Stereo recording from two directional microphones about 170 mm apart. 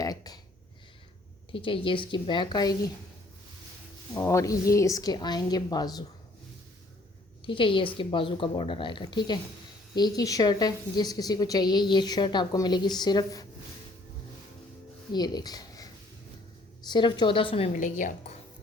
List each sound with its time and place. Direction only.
0.0 s a sound: 20° left (ahead or behind)
1.5 s a woman's voice: 30° left (ahead or behind)
4.1 s a woman's voice: 15° left (ahead or behind)
7.4 s a woman's voice: 30° left (ahead or behind)
15.1 s speech: 25° left (ahead or behind)
16.9 s a woman's voice: 25° left (ahead or behind)
17.7 s speech: 50° left (ahead or behind)